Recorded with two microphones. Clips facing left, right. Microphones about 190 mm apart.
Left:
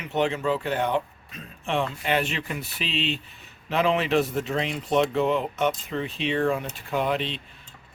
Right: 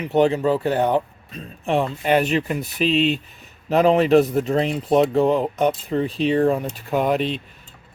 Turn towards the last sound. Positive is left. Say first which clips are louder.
# right 6 dB
turn(degrees=-45)  # may be behind; listen again after turning